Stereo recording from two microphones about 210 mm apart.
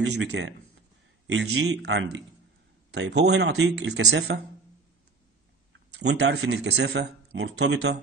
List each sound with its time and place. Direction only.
0.0 s speech: 55° right (ahead or behind)
1.6 s speech: 55° right (ahead or behind)
5.9 s speech: 55° right (ahead or behind)